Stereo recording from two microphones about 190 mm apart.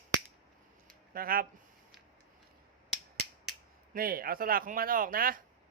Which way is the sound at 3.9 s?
50° right (ahead or behind).